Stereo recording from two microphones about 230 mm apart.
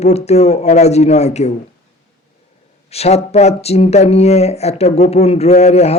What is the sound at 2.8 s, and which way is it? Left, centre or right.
Speech, left.